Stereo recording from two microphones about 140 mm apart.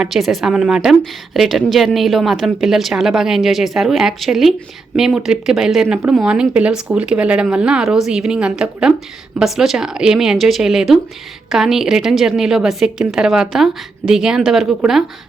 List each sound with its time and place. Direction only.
0.0 s a woman's voice: centre (ahead or behind)